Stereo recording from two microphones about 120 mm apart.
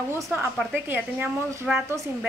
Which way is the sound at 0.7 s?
15° right (ahead or behind).